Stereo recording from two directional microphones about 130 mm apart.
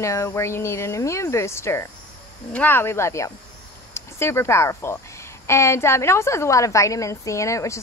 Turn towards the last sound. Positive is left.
turn(degrees=25)  # may be behind; listen again after turning